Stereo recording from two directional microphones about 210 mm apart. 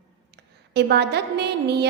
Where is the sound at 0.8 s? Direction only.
50° right (ahead or behind).